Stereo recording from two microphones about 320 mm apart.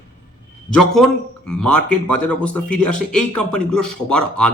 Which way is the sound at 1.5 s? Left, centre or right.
Centre.